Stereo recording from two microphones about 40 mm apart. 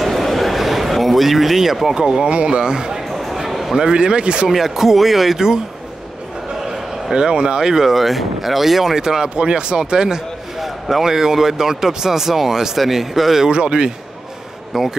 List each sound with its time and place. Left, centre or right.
0.0 s a sound: centre
2.0 s a man's voice: centre
3.1 s a sound: centre
3.7 s a man's voice: centre
4.5 s speech: centre
7.2 s speech: right; by 8.9 s centre
8.9 s a man's voice: centre
10.6 s speech: centre
13.5 s a man's voice: right
14.7 s speech: centre